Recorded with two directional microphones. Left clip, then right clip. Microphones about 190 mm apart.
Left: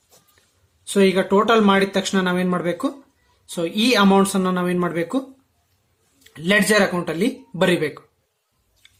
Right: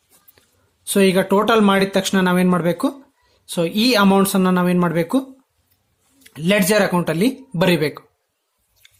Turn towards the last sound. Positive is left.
turn(degrees=-35)  # may be behind; listen again after turning